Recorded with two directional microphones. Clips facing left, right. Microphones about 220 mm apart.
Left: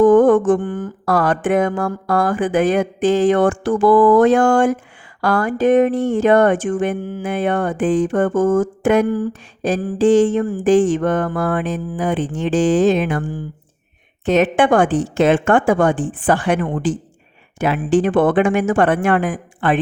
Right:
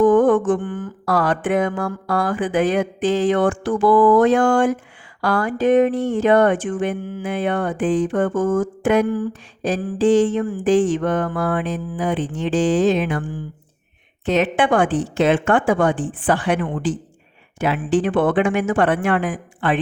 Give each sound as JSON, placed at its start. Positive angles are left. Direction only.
{"t": 0.0, "sound": "mantra", "side_deg": 45}